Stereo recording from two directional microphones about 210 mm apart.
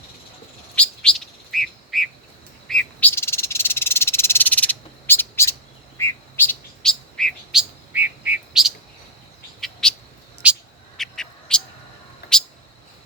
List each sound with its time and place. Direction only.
0.8 s bird: 5° left (ahead or behind)
2.6 s frog: 5° left (ahead or behind)
6.0 s bird: 10° left (ahead or behind)
7.9 s bird: 10° right (ahead or behind)
10.4 s cat: centre (ahead or behind)
12.2 s a sound: 50° left (ahead or behind)